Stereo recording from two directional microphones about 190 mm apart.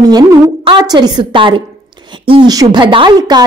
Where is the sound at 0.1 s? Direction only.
25° right (ahead or behind).